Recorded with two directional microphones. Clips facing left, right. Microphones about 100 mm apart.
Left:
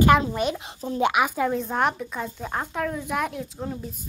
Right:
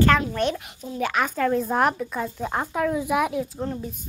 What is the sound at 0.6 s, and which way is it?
Speech, 30° left (ahead or behind).